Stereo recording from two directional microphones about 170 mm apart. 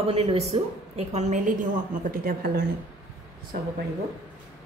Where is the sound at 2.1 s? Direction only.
60° right (ahead or behind).